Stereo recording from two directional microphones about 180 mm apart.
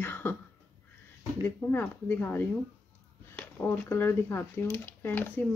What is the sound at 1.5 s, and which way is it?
Speech, 10° left (ahead or behind).